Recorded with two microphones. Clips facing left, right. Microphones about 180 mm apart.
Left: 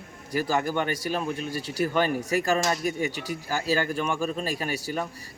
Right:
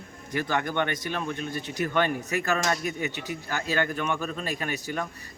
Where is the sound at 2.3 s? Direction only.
35° left (ahead or behind).